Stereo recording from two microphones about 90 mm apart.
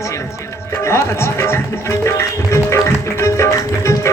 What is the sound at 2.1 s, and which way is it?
Music, 30° left (ahead or behind).